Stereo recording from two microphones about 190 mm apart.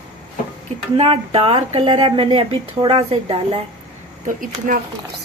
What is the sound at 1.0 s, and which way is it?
A woman's voice, 30° right (ahead or behind).